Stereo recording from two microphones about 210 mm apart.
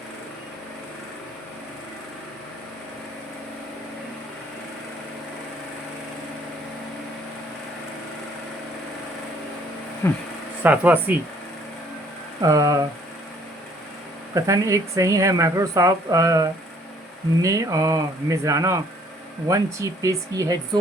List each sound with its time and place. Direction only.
10.0 s speech: 15° left (ahead or behind)
10.6 s speech: 10° right (ahead or behind)
12.4 s speech: 15° right (ahead or behind)
14.3 s speech: 15° right (ahead or behind)